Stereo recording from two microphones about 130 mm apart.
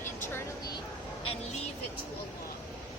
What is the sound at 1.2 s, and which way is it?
Vehicle, 50° left (ahead or behind).